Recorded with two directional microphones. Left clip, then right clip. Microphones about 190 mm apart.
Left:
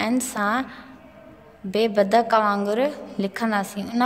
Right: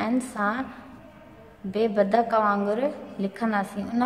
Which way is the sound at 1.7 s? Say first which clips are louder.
Left 3 dB; 45° left (ahead or behind).